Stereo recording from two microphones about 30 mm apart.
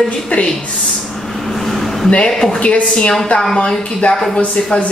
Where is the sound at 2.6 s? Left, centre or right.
Left.